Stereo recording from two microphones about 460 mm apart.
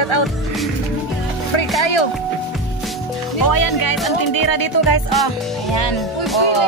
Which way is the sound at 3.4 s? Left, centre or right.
Left.